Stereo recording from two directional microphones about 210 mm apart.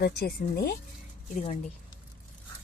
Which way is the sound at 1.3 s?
35° left (ahead or behind).